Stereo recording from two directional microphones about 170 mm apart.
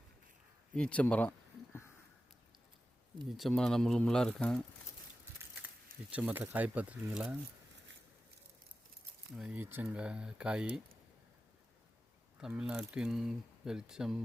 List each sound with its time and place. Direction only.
0.8 s speech: 5° left (ahead or behind)
3.3 s speech: centre (ahead or behind)
5.6 s speech: 10° right (ahead or behind)
9.3 s speech: 5° right (ahead or behind)
12.4 s speech: 5° right (ahead or behind)